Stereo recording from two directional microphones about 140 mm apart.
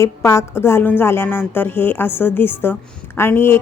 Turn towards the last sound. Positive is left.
turn(degrees=15)  # may be behind; listen again after turning